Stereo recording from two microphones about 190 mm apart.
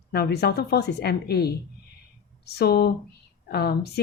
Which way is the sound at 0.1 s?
55° left (ahead or behind).